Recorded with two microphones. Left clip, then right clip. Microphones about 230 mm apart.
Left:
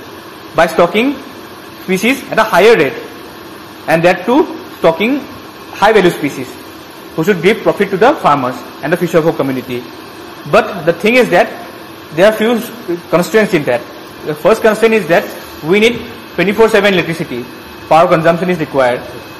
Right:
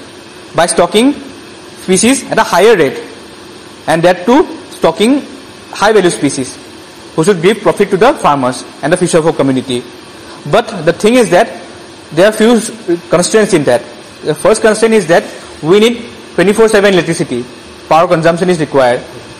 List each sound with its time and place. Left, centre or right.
0.6 s a man's voice: right
10.5 s a man's voice: right